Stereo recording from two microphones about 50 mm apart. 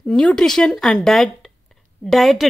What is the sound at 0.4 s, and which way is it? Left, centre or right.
Speech, centre.